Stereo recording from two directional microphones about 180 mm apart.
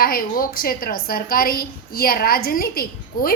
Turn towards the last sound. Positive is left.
turn(degrees=55)  # may be behind; listen again after turning